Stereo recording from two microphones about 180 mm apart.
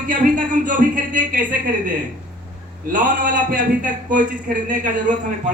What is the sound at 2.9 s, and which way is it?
Speech, 45° right (ahead or behind).